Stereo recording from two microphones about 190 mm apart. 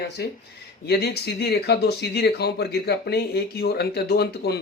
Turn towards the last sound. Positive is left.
turn(degrees=60)  # may be behind; listen again after turning